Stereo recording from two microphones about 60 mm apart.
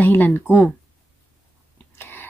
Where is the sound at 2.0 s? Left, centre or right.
Left.